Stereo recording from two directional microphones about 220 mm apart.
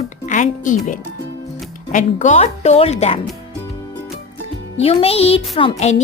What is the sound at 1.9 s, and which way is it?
Speech, 35° left (ahead or behind).